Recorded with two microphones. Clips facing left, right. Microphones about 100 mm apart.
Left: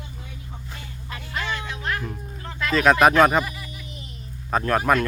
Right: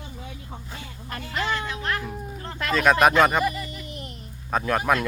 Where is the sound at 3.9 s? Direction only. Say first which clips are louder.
Right 4 dB; 60° right (ahead or behind).